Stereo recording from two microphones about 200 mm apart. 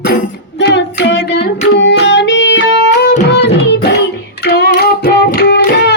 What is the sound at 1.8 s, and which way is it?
Music, 60° left (ahead or behind).